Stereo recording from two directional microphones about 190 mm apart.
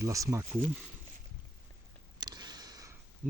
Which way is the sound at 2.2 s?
20° right (ahead or behind).